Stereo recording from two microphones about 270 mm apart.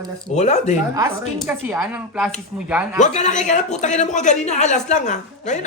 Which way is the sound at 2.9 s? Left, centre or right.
Left.